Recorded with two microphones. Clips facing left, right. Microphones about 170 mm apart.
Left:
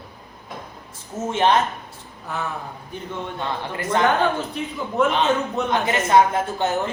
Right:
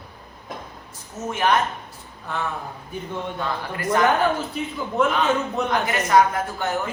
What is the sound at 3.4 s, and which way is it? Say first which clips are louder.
Speech: left 1 dB; 25° left (ahead or behind).